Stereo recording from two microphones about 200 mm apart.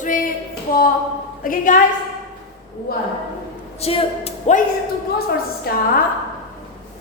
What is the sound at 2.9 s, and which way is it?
Speech, 50° left (ahead or behind).